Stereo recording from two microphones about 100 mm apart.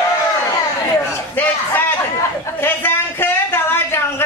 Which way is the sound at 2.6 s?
20° left (ahead or behind).